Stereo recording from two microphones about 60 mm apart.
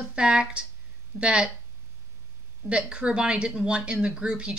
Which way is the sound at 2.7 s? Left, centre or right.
Centre.